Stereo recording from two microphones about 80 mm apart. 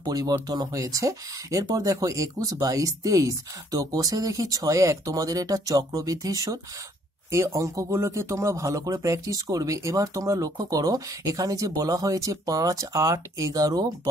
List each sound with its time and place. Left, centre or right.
0.1 s speech: right
7.2 s speech: right